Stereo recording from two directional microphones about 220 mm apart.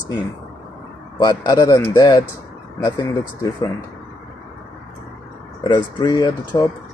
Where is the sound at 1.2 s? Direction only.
15° left (ahead or behind).